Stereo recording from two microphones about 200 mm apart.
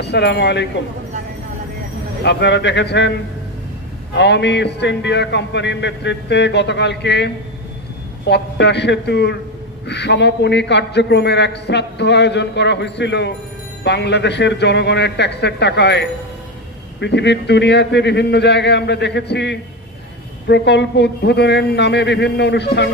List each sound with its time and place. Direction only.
0.0 s a man's voice: 60° left (ahead or behind)
2.2 s a man's voice: 60° left (ahead or behind)
4.1 s a man's voice: 60° left (ahead or behind)
8.3 s a man's voice: 60° left (ahead or behind)